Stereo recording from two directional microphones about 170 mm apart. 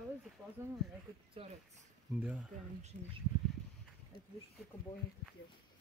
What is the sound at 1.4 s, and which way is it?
Speech, 30° right (ahead or behind).